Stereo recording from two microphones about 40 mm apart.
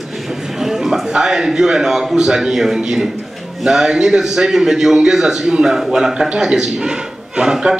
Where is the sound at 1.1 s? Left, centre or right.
Centre.